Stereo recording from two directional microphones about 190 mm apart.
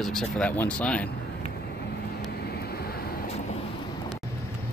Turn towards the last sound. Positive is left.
turn(degrees=55)  # may be behind; listen again after turning